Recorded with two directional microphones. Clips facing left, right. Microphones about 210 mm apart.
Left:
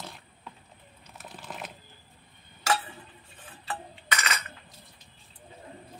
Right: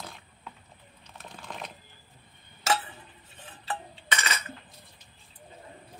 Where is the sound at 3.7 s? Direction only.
25° right (ahead or behind).